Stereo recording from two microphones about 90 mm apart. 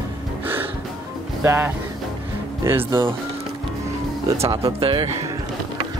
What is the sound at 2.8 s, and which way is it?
Speech, 55° right (ahead or behind).